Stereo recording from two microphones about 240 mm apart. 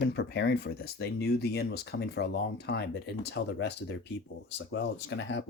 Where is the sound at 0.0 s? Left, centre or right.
Left.